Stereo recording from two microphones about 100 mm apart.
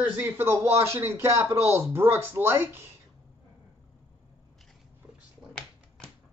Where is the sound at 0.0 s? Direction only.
20° right (ahead or behind).